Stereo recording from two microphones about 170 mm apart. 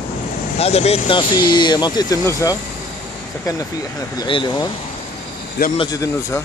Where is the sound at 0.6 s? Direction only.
40° left (ahead or behind).